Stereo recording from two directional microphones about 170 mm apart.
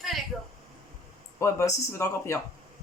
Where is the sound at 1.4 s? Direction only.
15° left (ahead or behind).